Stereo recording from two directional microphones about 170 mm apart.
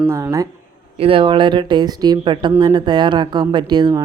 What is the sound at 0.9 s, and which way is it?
Speech, 35° right (ahead or behind).